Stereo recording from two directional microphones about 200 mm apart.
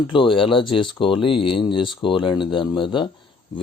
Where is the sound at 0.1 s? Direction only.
25° left (ahead or behind).